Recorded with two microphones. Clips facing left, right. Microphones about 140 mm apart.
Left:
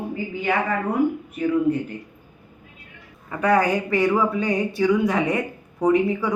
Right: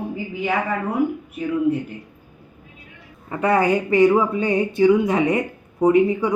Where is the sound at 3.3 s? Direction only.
25° right (ahead or behind).